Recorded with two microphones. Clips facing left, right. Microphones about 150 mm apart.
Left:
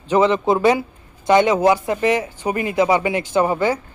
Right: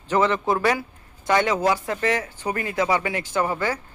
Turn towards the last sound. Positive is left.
turn(degrees=20)  # may be behind; listen again after turning